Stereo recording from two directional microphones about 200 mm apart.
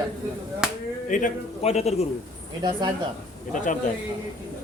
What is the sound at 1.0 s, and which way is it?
A man's voice, 40° left (ahead or behind).